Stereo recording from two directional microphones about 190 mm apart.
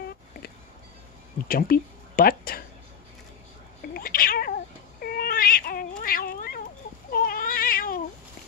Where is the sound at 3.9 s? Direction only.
50° left (ahead or behind).